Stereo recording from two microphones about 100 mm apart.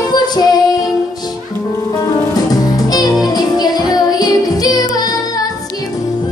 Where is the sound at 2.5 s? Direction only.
40° left (ahead or behind).